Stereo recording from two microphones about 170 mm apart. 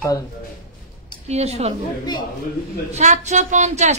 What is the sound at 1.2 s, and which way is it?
Speech, 40° right (ahead or behind).